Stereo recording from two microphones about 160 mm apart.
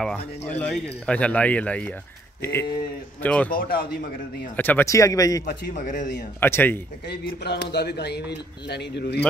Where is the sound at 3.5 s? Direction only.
60° left (ahead or behind).